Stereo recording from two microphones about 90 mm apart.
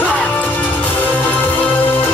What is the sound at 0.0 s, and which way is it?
Music, 15° left (ahead or behind).